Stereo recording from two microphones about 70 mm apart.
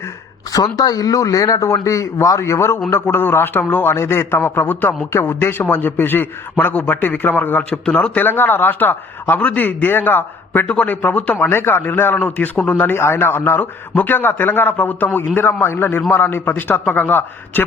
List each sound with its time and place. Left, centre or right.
0.5 s speech: left
2.4 s a man's voice: left
3.8 s a man's voice: left
11.4 s a man's voice: left